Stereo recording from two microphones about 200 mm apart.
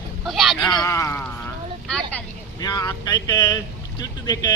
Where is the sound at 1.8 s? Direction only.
5° left (ahead or behind).